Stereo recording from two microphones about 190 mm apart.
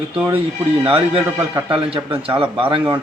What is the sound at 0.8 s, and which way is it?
Speech, 30° right (ahead or behind).